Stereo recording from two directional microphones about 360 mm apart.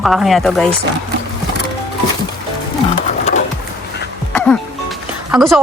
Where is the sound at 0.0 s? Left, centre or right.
Centre.